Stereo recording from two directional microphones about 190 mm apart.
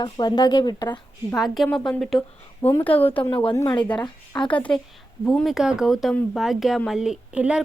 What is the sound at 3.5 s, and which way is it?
Speech, 20° left (ahead or behind).